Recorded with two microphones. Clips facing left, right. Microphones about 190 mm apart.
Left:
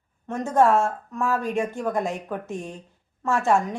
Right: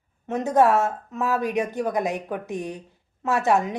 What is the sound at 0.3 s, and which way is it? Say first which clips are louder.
Speech: right 1 dB; 20° right (ahead or behind).